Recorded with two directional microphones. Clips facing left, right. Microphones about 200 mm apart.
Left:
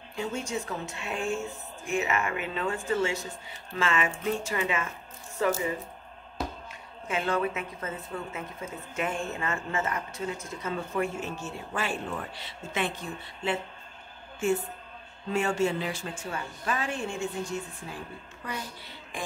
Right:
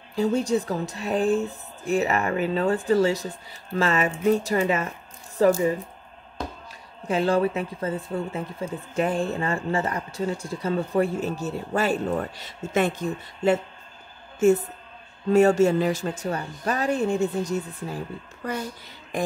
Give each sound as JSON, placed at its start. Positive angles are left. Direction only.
{"t": 0.1, "sound": "speech", "side_deg": -35}
{"t": 7.1, "sound": "speech", "side_deg": -35}